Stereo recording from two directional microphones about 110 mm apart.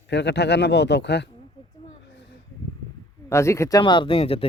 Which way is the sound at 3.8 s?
50° left (ahead or behind).